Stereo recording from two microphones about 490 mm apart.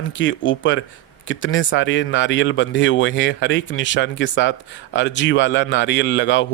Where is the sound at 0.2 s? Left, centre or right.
Left.